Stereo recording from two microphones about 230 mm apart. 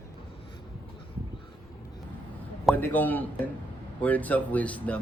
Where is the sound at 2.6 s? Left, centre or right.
Centre.